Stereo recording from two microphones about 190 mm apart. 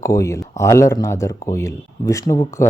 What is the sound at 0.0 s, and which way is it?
Speech, 15° left (ahead or behind).